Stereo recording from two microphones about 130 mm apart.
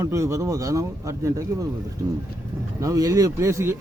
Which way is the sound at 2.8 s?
25° right (ahead or behind).